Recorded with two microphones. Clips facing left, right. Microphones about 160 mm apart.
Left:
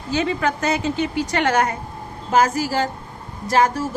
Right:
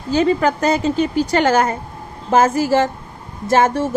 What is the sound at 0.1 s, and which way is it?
A woman's voice, 35° right (ahead or behind).